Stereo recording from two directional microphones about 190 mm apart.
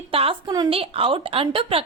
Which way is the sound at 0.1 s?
30° right (ahead or behind).